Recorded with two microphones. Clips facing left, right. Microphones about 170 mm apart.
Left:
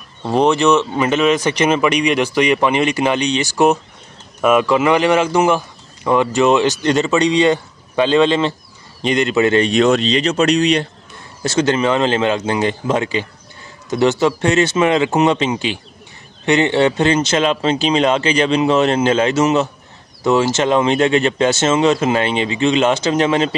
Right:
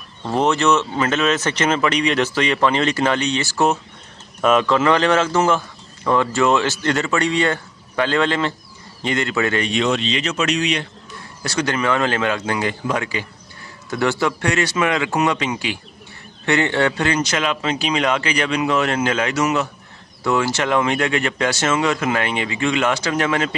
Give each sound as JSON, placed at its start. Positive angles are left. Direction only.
{"t": 0.3, "sound": "speech", "side_deg": 15}
{"t": 9.7, "sound": "speech", "side_deg": 45}
{"t": 11.4, "sound": "speech", "side_deg": 25}